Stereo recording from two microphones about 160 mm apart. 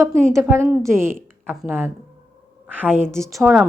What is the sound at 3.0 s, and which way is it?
Speech, 5° left (ahead or behind).